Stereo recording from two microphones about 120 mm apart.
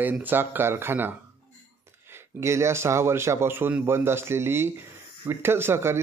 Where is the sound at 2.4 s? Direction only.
25° right (ahead or behind).